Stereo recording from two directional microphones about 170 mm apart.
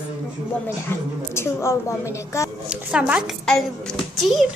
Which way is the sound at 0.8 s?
15° left (ahead or behind).